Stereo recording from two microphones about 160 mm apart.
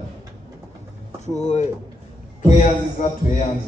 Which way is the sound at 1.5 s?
45° left (ahead or behind).